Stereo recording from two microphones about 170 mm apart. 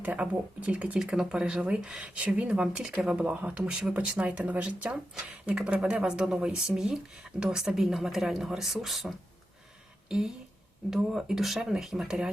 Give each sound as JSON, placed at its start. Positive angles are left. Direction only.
{"t": 0.0, "sound": "speech", "side_deg": -10}